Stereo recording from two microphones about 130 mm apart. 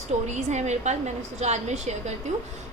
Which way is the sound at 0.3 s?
60° right (ahead or behind).